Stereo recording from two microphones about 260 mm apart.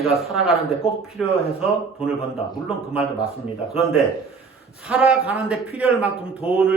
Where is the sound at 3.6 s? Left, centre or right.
Centre.